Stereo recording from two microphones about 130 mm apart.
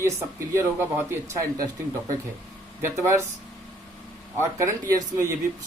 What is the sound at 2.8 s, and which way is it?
Speech, 25° right (ahead or behind).